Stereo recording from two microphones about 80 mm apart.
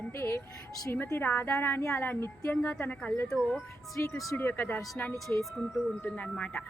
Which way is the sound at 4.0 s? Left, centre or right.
Left.